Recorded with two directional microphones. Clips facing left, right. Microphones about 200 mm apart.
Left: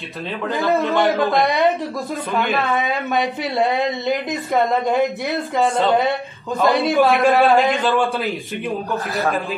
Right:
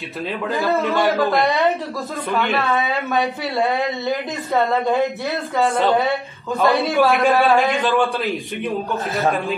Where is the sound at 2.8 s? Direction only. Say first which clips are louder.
Even; 15° left (ahead or behind).